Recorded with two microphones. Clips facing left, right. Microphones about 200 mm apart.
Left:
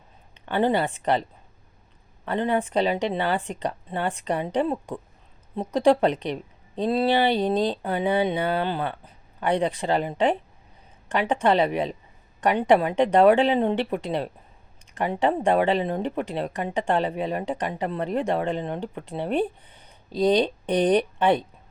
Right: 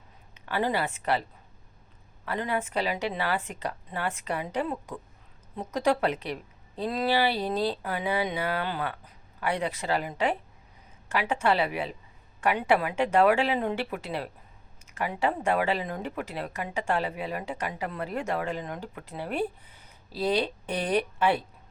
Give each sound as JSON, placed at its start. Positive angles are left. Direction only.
{"t": 0.4, "sound": "speech", "side_deg": 30}
{"t": 2.2, "sound": "speech", "side_deg": 30}